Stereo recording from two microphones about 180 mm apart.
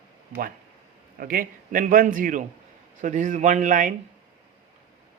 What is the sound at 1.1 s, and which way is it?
A man's voice, 50° right (ahead or behind).